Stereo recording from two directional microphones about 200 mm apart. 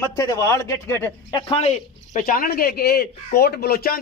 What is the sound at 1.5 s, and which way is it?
Speech, 35° left (ahead or behind).